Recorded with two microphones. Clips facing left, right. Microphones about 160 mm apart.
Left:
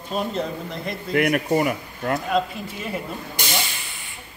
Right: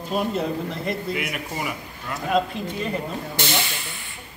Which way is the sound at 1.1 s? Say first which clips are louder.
Left 9 dB; 55° left (ahead or behind).